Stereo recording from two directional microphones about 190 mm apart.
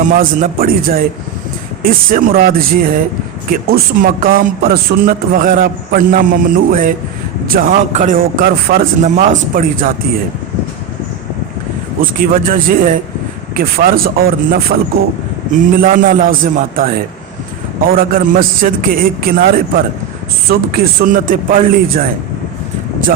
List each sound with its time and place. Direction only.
0.1 s a man's voice: 45° right (ahead or behind)
12.2 s a man's voice: 50° right (ahead or behind)
15.8 s a man's voice: 50° right (ahead or behind)
17.9 s a man's voice: 50° right (ahead or behind)